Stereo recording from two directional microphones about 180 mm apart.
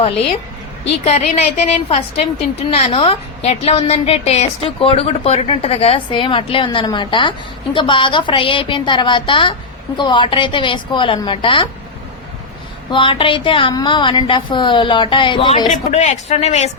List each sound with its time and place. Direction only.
1.0 s a woman's voice: 35° left (ahead or behind)
12.9 s a woman's voice: 30° left (ahead or behind)
15.7 s speech: 40° left (ahead or behind)